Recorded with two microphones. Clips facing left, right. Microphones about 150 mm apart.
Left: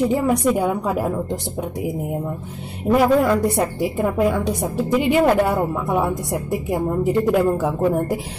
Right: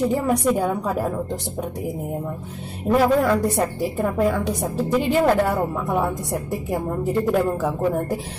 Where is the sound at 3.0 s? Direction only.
10° left (ahead or behind).